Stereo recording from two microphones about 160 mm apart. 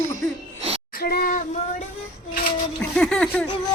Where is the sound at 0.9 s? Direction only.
70° left (ahead or behind); by 1.6 s 55° left (ahead or behind).